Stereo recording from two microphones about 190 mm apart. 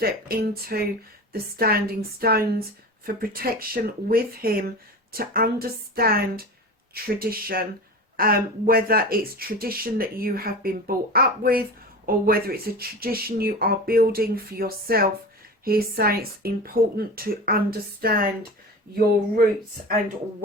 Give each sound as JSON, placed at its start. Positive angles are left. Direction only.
{"t": 0.0, "sound": "speech", "side_deg": -55}